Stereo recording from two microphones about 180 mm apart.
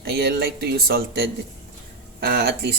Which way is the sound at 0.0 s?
60° right (ahead or behind).